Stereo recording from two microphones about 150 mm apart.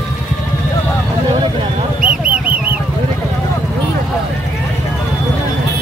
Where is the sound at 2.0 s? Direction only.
10° right (ahead or behind).